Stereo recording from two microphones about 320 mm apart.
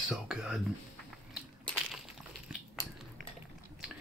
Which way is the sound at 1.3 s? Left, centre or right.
Centre.